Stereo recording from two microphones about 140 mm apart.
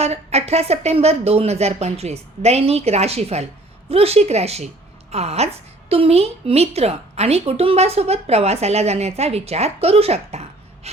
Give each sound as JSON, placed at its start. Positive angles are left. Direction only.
{"t": 0.0, "sound": "a woman's voice", "side_deg": -50}